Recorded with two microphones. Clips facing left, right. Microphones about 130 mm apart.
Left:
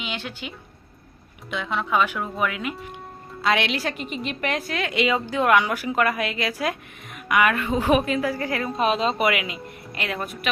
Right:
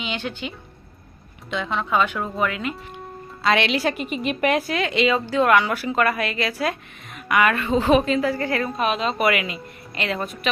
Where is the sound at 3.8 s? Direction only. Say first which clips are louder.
Right 5 dB; 10° right (ahead or behind).